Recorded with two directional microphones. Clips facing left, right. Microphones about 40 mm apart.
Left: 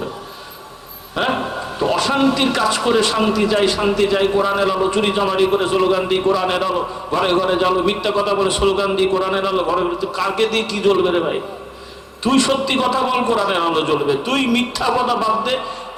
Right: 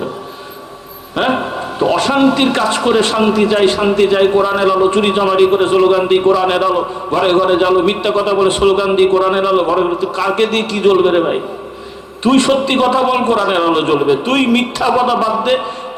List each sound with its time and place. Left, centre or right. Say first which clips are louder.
2.0 s a man's voice: right 4 dB; right
8.4 s a man's voice: right 5 dB; right
8.7 s a man's voice: right 6 dB; right
10.5 s a man's voice: right 4 dB; right